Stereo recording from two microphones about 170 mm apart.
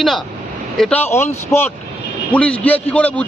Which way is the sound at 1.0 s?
15° left (ahead or behind).